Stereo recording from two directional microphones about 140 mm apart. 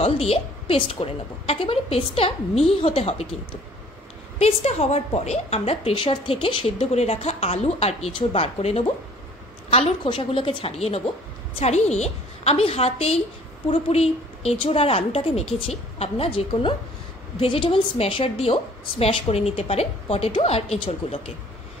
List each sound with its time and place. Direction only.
0.0 s a woman's voice: 45° left (ahead or behind)
4.4 s a woman's voice: 50° left (ahead or behind)